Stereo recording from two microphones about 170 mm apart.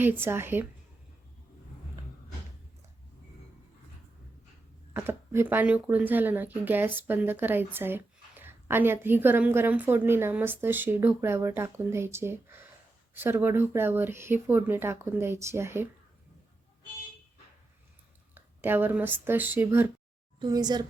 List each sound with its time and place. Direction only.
0.0 s speech: 15° right (ahead or behind)
4.9 s speech: 15° right (ahead or behind)
18.3 s speech: 10° right (ahead or behind)
20.4 s a woman's voice: 25° right (ahead or behind)